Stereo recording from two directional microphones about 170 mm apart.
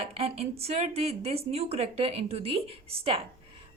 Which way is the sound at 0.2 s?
35° right (ahead or behind).